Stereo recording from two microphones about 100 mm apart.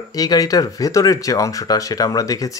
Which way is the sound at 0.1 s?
40° left (ahead or behind).